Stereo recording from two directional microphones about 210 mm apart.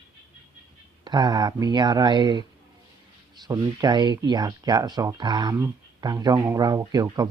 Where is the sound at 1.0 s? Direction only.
20° right (ahead or behind).